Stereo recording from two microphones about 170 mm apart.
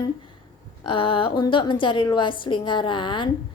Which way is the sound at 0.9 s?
30° left (ahead or behind).